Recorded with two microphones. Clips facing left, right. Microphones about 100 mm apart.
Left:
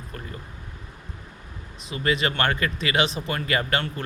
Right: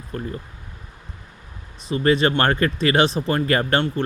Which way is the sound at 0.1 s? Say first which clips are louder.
Right 10 dB; 30° right (ahead or behind).